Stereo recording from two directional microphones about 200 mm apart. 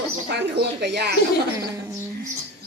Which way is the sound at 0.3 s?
55° right (ahead or behind).